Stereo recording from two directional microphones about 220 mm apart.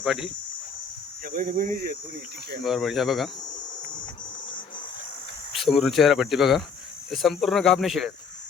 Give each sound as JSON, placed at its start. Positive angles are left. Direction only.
{"t": 0.0, "sound": "speech", "side_deg": 0}
{"t": 1.2, "sound": "speech", "side_deg": -40}
{"t": 2.6, "sound": "speech", "side_deg": 0}
{"t": 5.5, "sound": "speech", "side_deg": 0}